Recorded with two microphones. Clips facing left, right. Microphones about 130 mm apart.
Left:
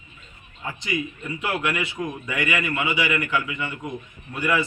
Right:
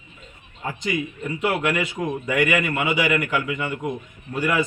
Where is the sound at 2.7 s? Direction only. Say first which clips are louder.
Right 3 dB; 50° right (ahead or behind).